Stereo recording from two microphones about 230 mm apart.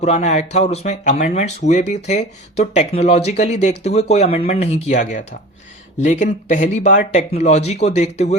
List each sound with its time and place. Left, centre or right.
0.0 s speech: left